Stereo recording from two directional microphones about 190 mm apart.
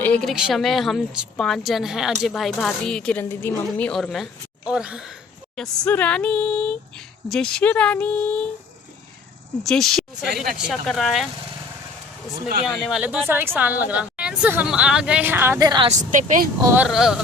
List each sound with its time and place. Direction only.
0.0 s a woman's voice: 5° left (ahead or behind)
9.6 s a woman's voice: centre (ahead or behind)
12.6 s a woman's voice: centre (ahead or behind); by 15.9 s 20° right (ahead or behind)
15.9 s a woman's voice: 40° right (ahead or behind)
16.6 s a woman's voice: 5° right (ahead or behind)